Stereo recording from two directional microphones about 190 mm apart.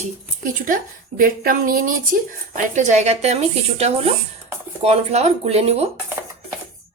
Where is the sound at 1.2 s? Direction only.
45° right (ahead or behind).